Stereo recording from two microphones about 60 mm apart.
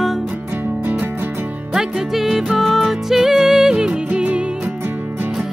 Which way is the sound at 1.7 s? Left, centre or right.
Centre.